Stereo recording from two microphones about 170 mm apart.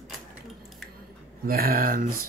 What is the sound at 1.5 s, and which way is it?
Speech, 60° right (ahead or behind).